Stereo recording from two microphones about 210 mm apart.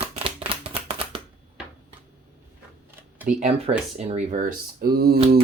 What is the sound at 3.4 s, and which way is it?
Speech, 30° right (ahead or behind).